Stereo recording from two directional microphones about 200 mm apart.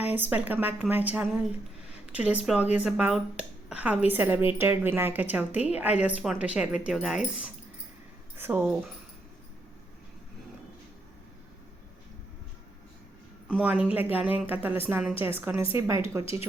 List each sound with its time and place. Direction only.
0.0 s a woman's voice: 10° right (ahead or behind)
13.5 s a woman's voice: 5° right (ahead or behind)
16.2 s speech: 30° left (ahead or behind)